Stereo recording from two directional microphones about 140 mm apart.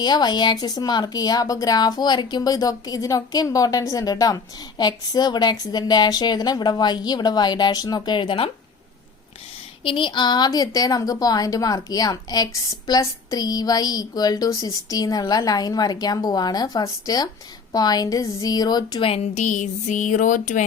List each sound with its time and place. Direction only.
0.0 s a woman's voice: 30° left (ahead or behind)
9.8 s a woman's voice: 35° left (ahead or behind)
19.0 s speech: 50° left (ahead or behind); by 20.7 s 65° left (ahead or behind)